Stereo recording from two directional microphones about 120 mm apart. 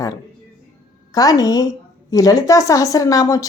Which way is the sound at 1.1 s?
30° left (ahead or behind).